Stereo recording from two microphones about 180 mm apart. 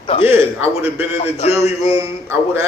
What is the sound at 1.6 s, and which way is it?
Speech, 15° right (ahead or behind).